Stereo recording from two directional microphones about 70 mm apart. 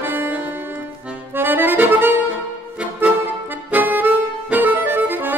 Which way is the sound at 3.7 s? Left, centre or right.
Right.